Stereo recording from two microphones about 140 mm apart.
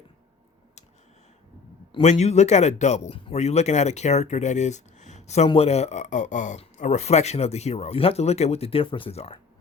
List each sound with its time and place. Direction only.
1.9 s a man's voice: 50° left (ahead or behind)